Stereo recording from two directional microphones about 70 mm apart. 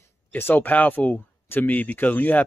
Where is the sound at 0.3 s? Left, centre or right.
Left.